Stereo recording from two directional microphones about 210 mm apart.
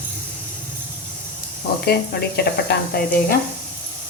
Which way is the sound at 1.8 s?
50° left (ahead or behind).